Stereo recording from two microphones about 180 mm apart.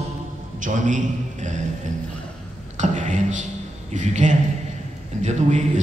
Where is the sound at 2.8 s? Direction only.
40° right (ahead or behind).